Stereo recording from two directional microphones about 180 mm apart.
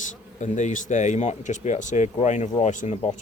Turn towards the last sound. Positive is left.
turn(degrees=45)  # may be behind; listen again after turning